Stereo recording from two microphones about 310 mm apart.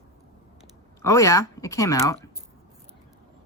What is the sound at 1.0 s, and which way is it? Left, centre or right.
Speech, centre.